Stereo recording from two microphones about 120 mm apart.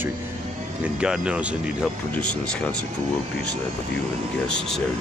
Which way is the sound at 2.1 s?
10° left (ahead or behind).